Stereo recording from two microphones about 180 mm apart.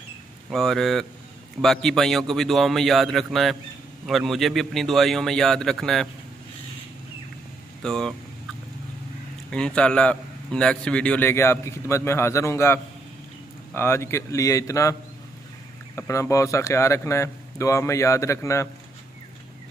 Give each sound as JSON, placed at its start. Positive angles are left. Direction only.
{"t": 0.5, "sound": "a man's voice", "side_deg": 0}
{"t": 7.8, "sound": "speech", "side_deg": 5}
{"t": 9.5, "sound": "a man's voice", "side_deg": 5}
{"t": 16.0, "sound": "a man's voice", "side_deg": 15}